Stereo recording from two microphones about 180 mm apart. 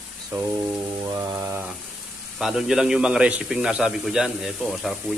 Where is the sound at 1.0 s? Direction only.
20° right (ahead or behind).